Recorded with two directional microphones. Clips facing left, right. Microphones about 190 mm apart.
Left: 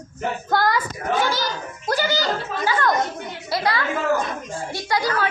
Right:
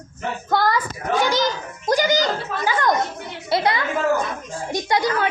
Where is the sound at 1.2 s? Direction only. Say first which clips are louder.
Right 3 dB; 20° right (ahead or behind).